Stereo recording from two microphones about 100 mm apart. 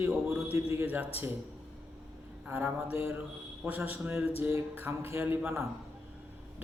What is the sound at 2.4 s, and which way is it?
A man's voice, 20° right (ahead or behind).